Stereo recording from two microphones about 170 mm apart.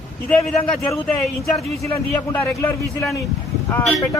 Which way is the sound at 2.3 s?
10° left (ahead or behind).